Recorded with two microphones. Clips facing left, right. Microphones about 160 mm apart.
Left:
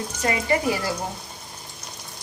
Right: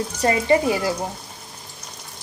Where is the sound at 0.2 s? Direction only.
30° right (ahead or behind).